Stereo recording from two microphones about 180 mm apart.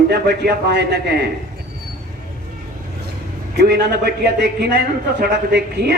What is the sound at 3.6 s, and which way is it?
A man's voice, 65° right (ahead or behind).